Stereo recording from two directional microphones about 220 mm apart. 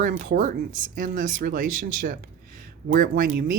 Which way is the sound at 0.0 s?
40° right (ahead or behind).